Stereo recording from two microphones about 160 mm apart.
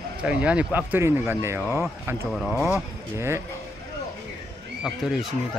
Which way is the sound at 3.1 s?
15° right (ahead or behind).